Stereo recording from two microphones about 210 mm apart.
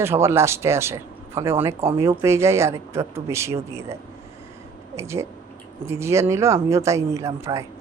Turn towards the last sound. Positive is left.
turn(degrees=-15)  # may be behind; listen again after turning